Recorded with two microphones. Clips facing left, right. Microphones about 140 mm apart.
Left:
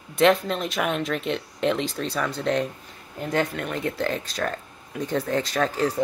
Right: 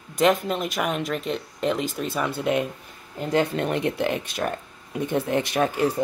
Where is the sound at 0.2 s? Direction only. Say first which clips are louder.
Left 1 dB; 5° right (ahead or behind).